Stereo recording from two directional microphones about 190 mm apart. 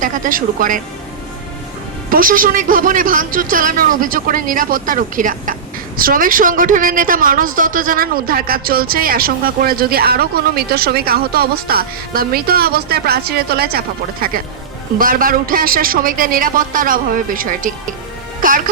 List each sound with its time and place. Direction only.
0.0 s speech: 45° right (ahead or behind)
2.0 s speech: 45° right (ahead or behind)
18.3 s music: 45° right (ahead or behind)